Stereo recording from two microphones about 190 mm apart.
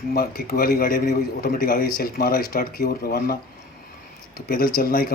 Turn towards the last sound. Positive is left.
turn(degrees=50)  # may be behind; listen again after turning